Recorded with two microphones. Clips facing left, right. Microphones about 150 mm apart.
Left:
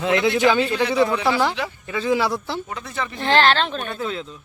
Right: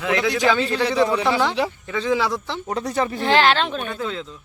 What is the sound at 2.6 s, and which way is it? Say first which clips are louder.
Speech: right 7 dB; 40° right (ahead or behind).